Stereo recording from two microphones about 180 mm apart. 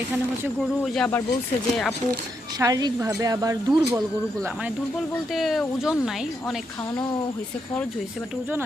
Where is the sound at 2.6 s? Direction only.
20° right (ahead or behind).